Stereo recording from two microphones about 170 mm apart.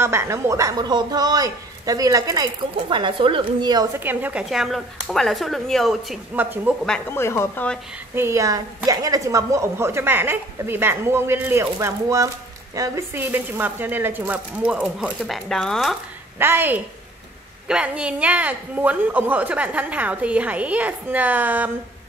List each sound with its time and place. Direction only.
0.0 s a man's voice: 15° right (ahead or behind)
4.0 s speech: 10° right (ahead or behind)
6.3 s a woman's voice: 10° right (ahead or behind)
6.9 s a woman's voice: 15° left (ahead or behind)
8.1 s a woman's voice: 15° right (ahead or behind); by 16.0 s centre (ahead or behind)
16.3 s a woman's voice: 10° right (ahead or behind)